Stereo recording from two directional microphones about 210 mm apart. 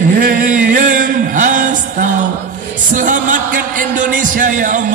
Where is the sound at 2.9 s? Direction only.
40° right (ahead or behind).